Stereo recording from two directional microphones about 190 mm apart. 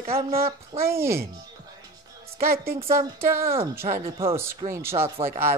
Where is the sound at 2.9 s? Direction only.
15° right (ahead or behind).